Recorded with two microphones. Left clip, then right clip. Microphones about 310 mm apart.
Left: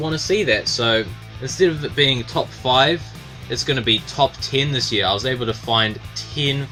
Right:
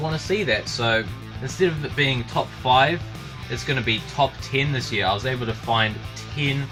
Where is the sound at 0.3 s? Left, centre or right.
Left.